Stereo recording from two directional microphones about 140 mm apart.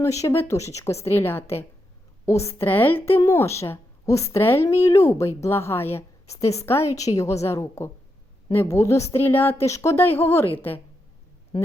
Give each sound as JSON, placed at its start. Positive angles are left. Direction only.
{"t": 0.0, "sound": "a woman's voice", "side_deg": 20}
{"t": 6.3, "sound": "a woman's voice", "side_deg": 50}
{"t": 6.7, "sound": "a woman's voice", "side_deg": 20}